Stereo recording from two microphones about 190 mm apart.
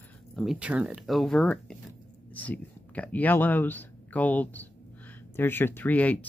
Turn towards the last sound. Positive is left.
turn(degrees=10)  # may be behind; listen again after turning